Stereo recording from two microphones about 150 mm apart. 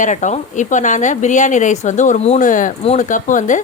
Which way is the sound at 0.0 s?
55° left (ahead or behind).